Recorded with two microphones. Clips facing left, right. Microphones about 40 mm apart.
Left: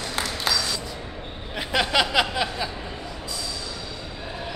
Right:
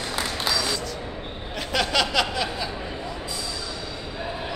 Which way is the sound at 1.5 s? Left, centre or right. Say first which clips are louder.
Left 1 dB; centre.